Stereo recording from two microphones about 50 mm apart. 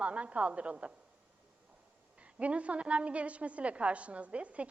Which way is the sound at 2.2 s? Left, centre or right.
Right.